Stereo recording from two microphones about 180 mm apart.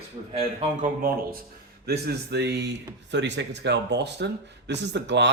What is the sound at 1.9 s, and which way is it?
Speech, 65° right (ahead or behind).